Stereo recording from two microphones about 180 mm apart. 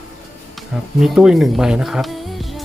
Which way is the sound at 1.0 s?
5° right (ahead or behind).